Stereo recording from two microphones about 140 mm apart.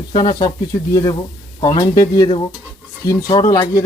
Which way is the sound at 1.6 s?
25° left (ahead or behind).